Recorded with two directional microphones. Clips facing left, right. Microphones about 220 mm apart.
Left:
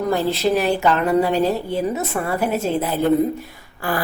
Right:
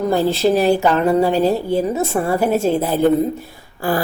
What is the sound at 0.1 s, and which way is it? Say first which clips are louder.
Speech: right 3 dB; 30° right (ahead or behind).